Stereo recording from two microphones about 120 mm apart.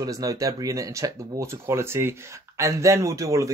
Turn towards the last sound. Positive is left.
turn(degrees=-25)  # may be behind; listen again after turning